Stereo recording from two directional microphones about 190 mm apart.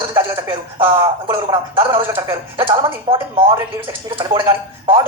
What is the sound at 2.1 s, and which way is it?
Speech, 15° right (ahead or behind).